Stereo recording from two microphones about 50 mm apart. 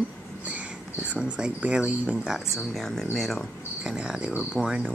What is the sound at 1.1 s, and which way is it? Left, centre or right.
Speech, right.